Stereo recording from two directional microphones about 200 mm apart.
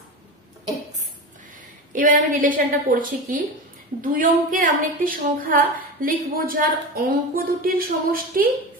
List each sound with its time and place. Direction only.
1.9 s a woman's voice: 40° right (ahead or behind)